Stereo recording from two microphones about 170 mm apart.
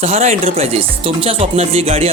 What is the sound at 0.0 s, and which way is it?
Speech, 40° right (ahead or behind).